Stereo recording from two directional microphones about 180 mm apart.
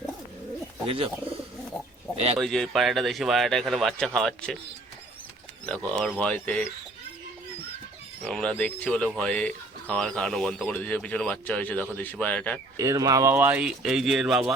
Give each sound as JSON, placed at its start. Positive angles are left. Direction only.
{"t": 0.9, "sound": "speech", "side_deg": -30}
{"t": 2.4, "sound": "speech", "side_deg": 0}
{"t": 5.6, "sound": "speech", "side_deg": 5}
{"t": 8.2, "sound": "speech", "side_deg": 5}
{"t": 12.7, "sound": "speech", "side_deg": -20}